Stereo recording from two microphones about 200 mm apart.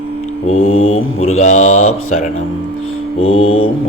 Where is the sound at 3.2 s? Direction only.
90° left.